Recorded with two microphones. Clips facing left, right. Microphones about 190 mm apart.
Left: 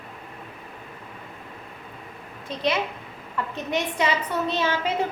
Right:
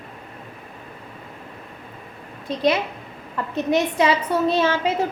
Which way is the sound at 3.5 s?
35° right (ahead or behind).